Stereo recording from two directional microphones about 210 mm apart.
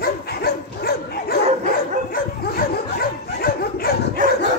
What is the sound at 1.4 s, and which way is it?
Dog, 35° right (ahead or behind).